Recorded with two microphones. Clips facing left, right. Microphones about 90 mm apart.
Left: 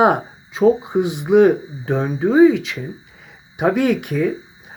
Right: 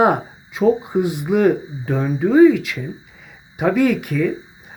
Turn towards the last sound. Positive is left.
turn(degrees=0)  # may be behind; listen again after turning